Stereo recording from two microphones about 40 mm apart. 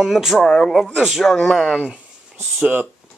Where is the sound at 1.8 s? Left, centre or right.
Right.